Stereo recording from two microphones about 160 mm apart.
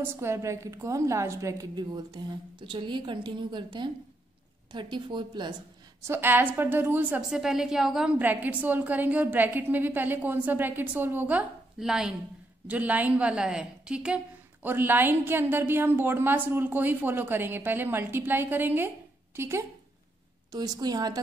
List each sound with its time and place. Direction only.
0.0 s a woman's voice: 15° right (ahead or behind)
6.0 s a woman's voice: 15° right (ahead or behind)